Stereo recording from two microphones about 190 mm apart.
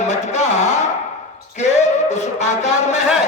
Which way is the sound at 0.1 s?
35° left (ahead or behind).